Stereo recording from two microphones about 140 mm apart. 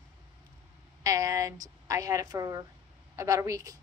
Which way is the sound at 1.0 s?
25° right (ahead or behind).